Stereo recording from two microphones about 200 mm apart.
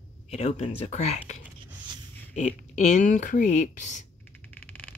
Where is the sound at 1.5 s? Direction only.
20° right (ahead or behind).